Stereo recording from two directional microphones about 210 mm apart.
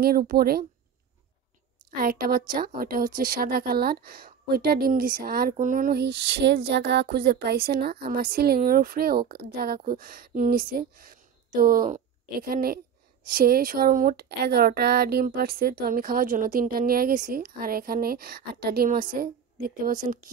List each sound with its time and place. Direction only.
0.0 s a woman's voice: 45° right (ahead or behind)
2.0 s a woman's voice: 45° right (ahead or behind)